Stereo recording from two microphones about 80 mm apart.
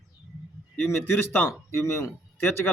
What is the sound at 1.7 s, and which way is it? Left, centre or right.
Speech, left.